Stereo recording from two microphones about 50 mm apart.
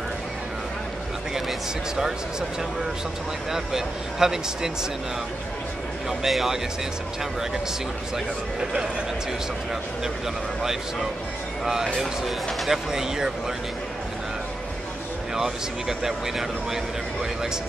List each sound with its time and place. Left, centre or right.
3.5 s speech: centre
6.0 s speech: centre
10.6 s speech: centre
15.3 s speech: centre